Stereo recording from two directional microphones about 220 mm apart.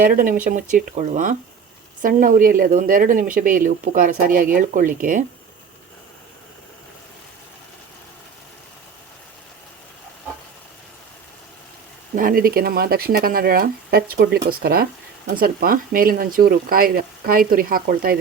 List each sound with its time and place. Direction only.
0.0 s speech: 40° right (ahead or behind)
12.1 s speech: 40° right (ahead or behind)